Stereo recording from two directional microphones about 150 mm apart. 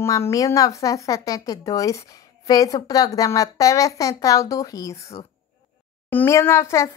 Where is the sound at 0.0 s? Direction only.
20° left (ahead or behind).